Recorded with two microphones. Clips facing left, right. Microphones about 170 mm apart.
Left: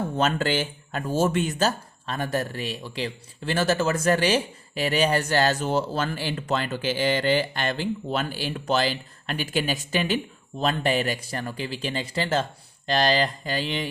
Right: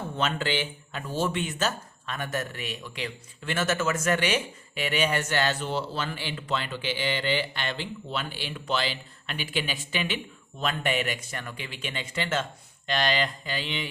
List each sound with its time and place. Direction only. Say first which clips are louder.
0.2 s speech: left 4 dB; 40° left (ahead or behind)